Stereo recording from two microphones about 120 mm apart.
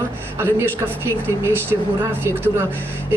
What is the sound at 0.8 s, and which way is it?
Speech, 25° right (ahead or behind).